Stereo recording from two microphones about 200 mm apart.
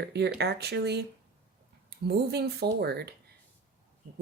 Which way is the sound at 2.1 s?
55° right (ahead or behind).